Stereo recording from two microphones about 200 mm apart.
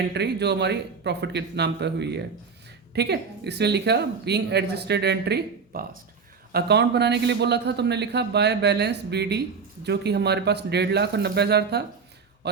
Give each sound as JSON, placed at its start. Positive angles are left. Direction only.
{"t": 0.1, "sound": "speech", "side_deg": -55}